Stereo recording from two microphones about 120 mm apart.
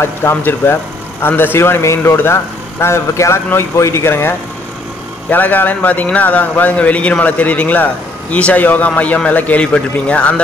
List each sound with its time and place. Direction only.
0.0 s a man's voice: 20° left (ahead or behind)